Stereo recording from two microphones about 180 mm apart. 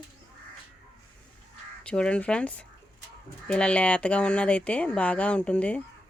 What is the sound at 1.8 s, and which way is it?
Speech, 5° left (ahead or behind).